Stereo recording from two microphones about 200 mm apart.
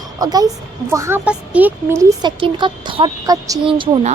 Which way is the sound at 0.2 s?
20° right (ahead or behind).